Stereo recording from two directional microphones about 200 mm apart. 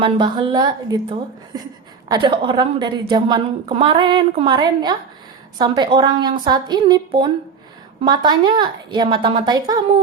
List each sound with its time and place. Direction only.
0.0 s a woman's voice: 20° right (ahead or behind)
2.0 s a woman's voice: 20° right (ahead or behind)